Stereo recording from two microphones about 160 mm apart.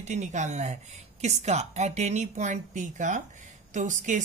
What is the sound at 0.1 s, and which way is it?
Speech, 50° right (ahead or behind).